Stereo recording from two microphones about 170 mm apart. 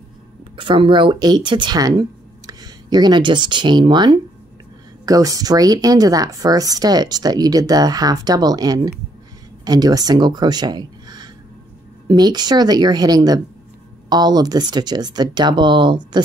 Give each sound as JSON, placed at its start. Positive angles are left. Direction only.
{"t": 0.6, "sound": "speech", "side_deg": -30}